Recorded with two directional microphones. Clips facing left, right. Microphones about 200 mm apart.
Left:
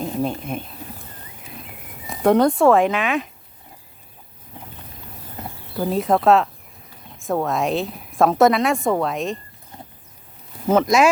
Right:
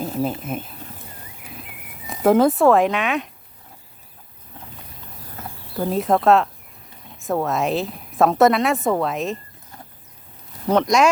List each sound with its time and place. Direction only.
0.0 s speech: 5° right (ahead or behind)
2.0 s a woman's voice: centre (ahead or behind)
5.7 s a woman's voice: centre (ahead or behind)
9.7 s a sound: 20° left (ahead or behind)
10.7 s a woman's voice: 5° left (ahead or behind)